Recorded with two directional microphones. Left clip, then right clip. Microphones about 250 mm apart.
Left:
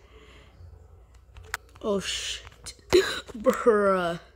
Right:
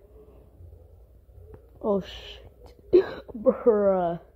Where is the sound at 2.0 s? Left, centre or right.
Centre.